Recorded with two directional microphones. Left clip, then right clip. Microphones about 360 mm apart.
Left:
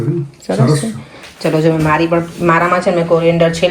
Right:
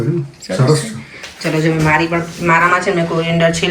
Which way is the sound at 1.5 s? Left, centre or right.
Centre.